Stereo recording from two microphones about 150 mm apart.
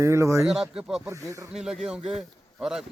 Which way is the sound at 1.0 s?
20° right (ahead or behind).